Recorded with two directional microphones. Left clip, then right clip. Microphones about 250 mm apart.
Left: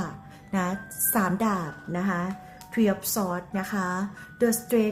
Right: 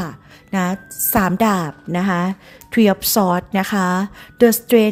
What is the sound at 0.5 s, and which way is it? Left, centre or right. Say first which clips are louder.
A woman's voice: right 7 dB; right.